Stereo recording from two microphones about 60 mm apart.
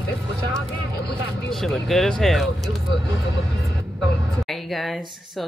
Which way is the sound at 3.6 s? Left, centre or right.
Right.